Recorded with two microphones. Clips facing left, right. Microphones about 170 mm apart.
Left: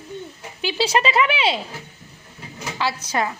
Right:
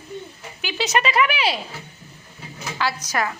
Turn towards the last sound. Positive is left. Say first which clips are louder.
# left 1 dB
turn(degrees=25)  # may be behind; listen again after turning